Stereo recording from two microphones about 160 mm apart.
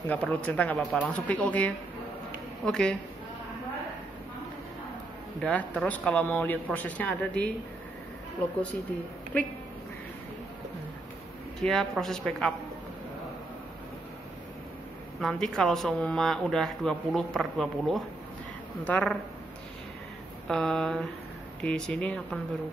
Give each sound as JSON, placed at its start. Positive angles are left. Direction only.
{"t": 0.1, "sound": "speech", "side_deg": 10}
{"t": 5.4, "sound": "speech", "side_deg": 10}
{"t": 11.6, "sound": "speech", "side_deg": 0}
{"t": 15.1, "sound": "speech", "side_deg": 5}
{"t": 20.4, "sound": "speech", "side_deg": 5}